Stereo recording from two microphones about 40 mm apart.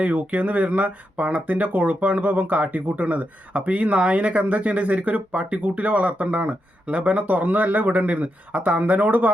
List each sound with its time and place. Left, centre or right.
0.0 s speech: right